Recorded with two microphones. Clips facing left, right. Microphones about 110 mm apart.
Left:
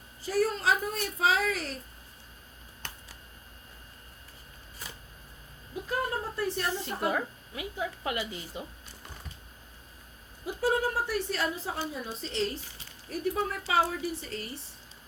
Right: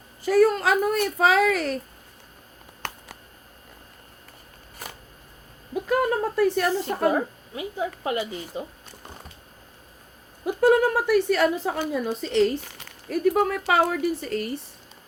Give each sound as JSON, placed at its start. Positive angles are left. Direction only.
{"t": 0.2, "sound": "speech", "side_deg": -70}
{"t": 2.8, "sound": "a sound", "side_deg": -70}
{"t": 5.7, "sound": "speech", "side_deg": -75}
{"t": 6.8, "sound": "a woman's voice", "side_deg": -60}
{"t": 7.1, "sound": "speech", "side_deg": -30}
{"t": 10.4, "sound": "a woman's voice", "side_deg": -60}